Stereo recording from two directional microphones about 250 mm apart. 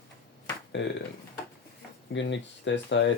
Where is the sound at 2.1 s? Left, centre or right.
Left.